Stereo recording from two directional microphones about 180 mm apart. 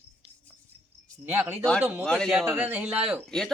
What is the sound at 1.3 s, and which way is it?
Speech, 15° right (ahead or behind).